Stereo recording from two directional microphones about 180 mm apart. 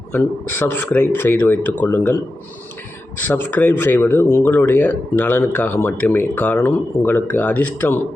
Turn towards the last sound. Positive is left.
turn(degrees=10)  # may be behind; listen again after turning